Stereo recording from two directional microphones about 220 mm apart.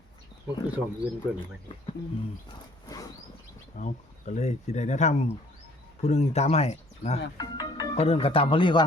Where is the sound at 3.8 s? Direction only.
35° left (ahead or behind).